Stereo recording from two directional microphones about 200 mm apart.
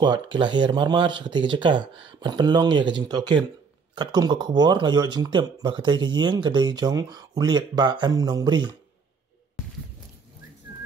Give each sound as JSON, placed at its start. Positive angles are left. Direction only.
{"t": 0.4, "sound": "speech", "side_deg": -25}